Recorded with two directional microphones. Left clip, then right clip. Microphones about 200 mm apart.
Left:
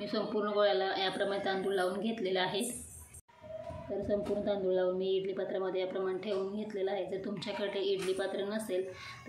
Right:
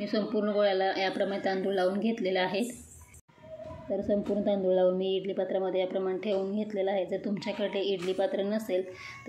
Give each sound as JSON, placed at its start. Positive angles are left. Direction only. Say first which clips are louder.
{"t": 0.0, "sound": "speech", "louder": "right 4 dB", "side_deg": -10}
{"t": 4.1, "sound": "a woman's voice", "louder": "right 4 dB", "side_deg": -5}